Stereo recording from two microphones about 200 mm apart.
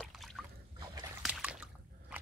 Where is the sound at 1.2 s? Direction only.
5° right (ahead or behind).